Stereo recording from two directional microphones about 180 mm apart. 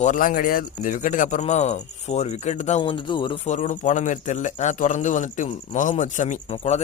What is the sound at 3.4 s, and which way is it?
A man's voice, 40° left (ahead or behind).